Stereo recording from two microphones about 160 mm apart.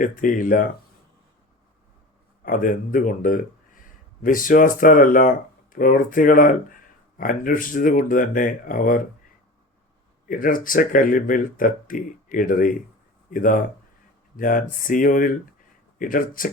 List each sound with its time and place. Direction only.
0.0 s speech: 55° left (ahead or behind)
2.4 s speech: 60° left (ahead or behind)
10.2 s speech: 60° left (ahead or behind)